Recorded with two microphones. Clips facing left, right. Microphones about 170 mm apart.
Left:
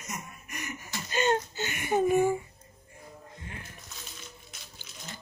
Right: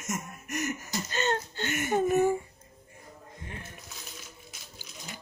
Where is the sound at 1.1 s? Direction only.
10° left (ahead or behind).